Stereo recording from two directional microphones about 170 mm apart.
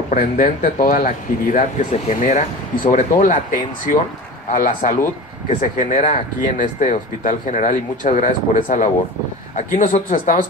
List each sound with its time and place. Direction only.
0.1 s speech: 55° left (ahead or behind)